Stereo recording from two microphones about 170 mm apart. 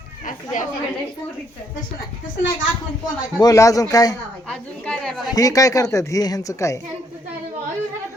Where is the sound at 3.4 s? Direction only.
20° left (ahead or behind).